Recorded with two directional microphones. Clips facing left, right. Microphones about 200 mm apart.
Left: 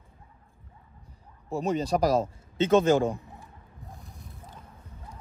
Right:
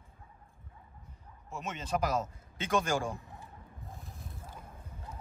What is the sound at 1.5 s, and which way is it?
A man's voice, 35° left (ahead or behind).